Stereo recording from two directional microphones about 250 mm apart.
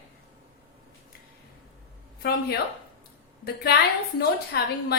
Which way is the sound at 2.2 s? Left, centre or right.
Left.